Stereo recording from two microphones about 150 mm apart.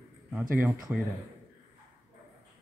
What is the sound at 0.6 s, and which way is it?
Speech, centre (ahead or behind).